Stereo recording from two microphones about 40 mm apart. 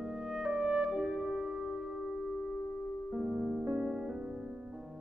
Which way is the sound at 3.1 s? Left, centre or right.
Right.